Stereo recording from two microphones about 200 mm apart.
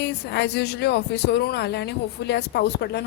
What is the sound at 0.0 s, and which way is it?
Speech, 60° left (ahead or behind).